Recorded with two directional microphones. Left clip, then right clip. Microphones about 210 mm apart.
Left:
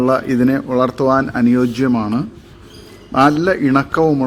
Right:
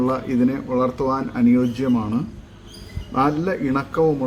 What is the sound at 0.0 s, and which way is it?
A man's voice, 15° left (ahead or behind).